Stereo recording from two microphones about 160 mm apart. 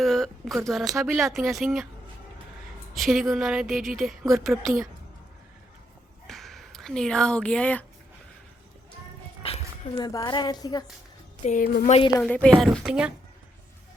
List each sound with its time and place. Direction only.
0.0 s a sound: centre (ahead or behind)
0.7 s a woman's voice: centre (ahead or behind)
2.9 s a woman's voice: centre (ahead or behind)
6.2 s a sound: centre (ahead or behind)
9.4 s music: 35° left (ahead or behind)
9.9 s speech: 25° left (ahead or behind)
11.4 s speech: 55° left (ahead or behind)
12.2 s a woman's voice: 5° left (ahead or behind)